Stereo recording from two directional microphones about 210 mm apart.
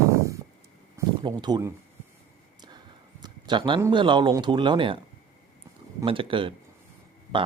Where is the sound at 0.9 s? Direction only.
20° right (ahead or behind).